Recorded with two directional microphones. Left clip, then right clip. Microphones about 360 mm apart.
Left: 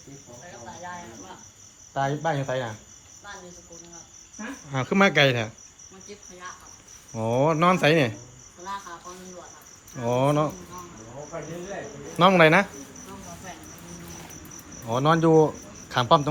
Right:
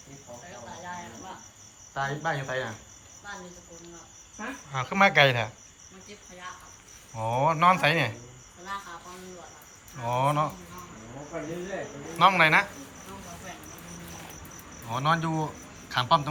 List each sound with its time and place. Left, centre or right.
2.0 s speech: centre
4.7 s speech: centre
7.1 s speech: centre
10.0 s speech: centre
12.1 s speech: centre
14.8 s speech: centre